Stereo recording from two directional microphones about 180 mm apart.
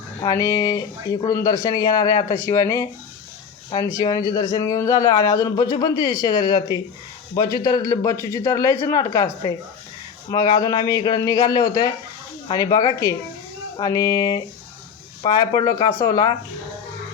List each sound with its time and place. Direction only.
0.2 s speech: 20° left (ahead or behind)
3.9 s speech: 20° left (ahead or behind)